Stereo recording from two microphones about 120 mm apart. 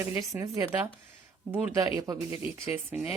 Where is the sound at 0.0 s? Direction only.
20° right (ahead or behind).